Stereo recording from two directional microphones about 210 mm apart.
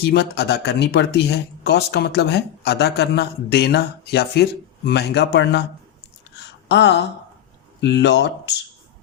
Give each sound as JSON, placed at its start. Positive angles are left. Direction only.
{"t": 0.0, "sound": "speech", "side_deg": 50}
{"t": 6.4, "sound": "a sound", "side_deg": 55}
{"t": 7.8, "sound": "speech", "side_deg": 55}